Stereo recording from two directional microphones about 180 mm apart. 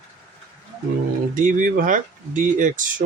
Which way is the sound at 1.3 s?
45° right (ahead or behind).